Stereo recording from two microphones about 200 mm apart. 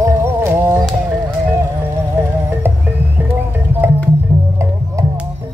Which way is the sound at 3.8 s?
10° right (ahead or behind).